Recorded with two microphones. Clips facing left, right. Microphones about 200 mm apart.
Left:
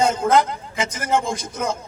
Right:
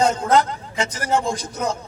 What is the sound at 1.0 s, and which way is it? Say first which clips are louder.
Speech: even; 35° right (ahead or behind).